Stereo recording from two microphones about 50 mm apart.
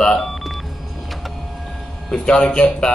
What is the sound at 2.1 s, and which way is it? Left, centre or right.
Speech, centre.